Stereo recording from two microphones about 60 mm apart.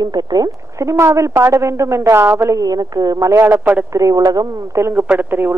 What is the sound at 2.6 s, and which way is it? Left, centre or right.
Speech, right.